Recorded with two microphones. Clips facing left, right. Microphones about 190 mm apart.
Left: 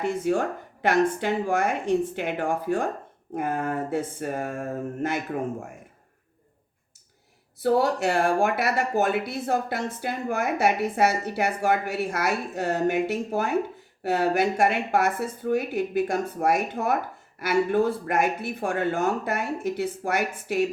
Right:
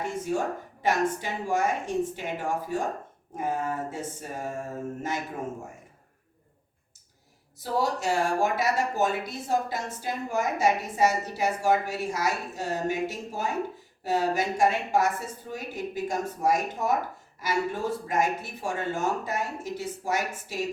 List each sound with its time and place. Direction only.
0.3 s speech: 65° left (ahead or behind)
7.6 s speech: 60° left (ahead or behind)